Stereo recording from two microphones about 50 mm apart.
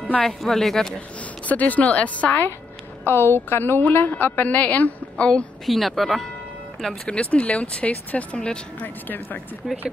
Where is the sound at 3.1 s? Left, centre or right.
Left.